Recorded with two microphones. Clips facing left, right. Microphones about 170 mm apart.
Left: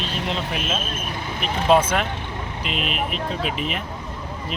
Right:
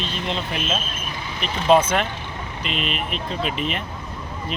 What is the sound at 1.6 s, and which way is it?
Speech, centre (ahead or behind).